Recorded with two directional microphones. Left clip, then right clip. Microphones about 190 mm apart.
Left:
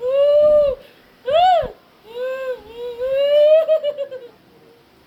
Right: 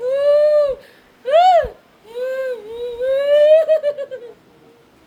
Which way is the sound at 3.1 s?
15° right (ahead or behind).